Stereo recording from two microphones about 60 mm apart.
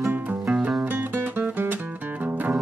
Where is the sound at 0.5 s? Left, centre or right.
Right.